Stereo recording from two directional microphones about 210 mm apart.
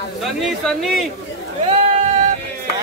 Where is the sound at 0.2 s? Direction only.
Centre (ahead or behind).